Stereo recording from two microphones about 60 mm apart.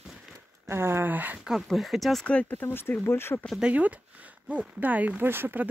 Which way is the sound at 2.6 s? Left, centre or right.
Left.